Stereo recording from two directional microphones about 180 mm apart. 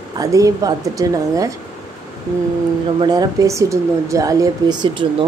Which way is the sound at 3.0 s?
20° right (ahead or behind).